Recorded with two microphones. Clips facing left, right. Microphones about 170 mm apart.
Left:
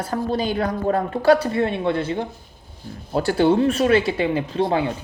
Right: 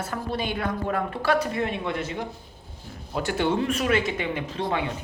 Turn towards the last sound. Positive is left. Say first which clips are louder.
# left 7 dB
turn(degrees=35)  # may be behind; listen again after turning